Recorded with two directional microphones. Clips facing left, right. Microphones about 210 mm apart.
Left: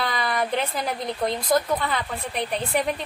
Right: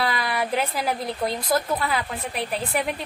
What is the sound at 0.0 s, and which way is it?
Speech, 5° right (ahead or behind).